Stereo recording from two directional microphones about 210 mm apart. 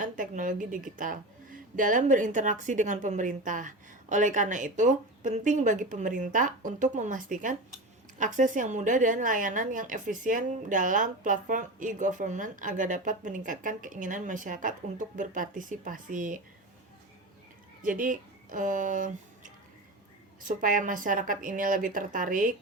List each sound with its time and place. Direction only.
0.0 s a woman's voice: 40° right (ahead or behind)
17.8 s a woman's voice: 40° right (ahead or behind)